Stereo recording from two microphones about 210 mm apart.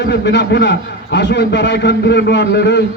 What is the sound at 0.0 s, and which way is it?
A man's voice, 55° left (ahead or behind).